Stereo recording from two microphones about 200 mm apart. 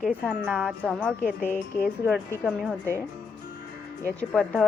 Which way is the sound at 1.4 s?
10° left (ahead or behind).